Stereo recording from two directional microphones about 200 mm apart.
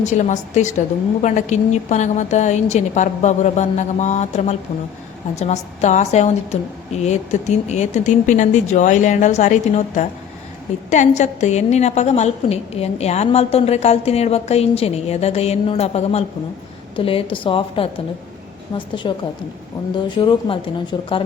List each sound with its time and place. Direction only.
0.0 s a woman's voice: 35° left (ahead or behind)
19.1 s speech: 25° left (ahead or behind)